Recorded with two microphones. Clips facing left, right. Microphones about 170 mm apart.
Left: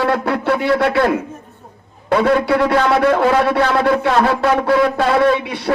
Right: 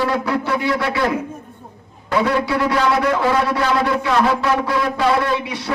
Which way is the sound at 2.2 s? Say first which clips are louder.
Left 3 dB; 55° left (ahead or behind).